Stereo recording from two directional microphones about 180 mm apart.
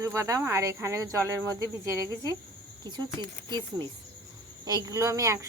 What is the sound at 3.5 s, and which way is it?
Speech, 25° right (ahead or behind).